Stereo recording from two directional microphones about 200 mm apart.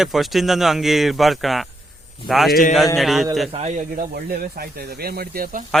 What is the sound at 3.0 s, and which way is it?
Speech, centre (ahead or behind).